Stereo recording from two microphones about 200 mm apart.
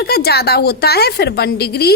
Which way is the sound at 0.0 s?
50° left (ahead or behind).